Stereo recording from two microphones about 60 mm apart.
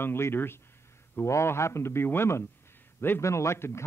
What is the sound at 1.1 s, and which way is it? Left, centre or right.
Speech, left.